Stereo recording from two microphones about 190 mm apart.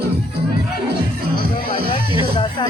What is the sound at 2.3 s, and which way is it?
Music, 25° left (ahead or behind).